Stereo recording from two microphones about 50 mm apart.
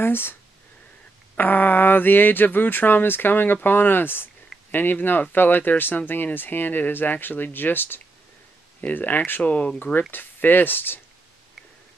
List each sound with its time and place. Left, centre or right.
0.0 s speech: left
1.3 s speech: left
9.5 s speech: left
10.1 s speech: left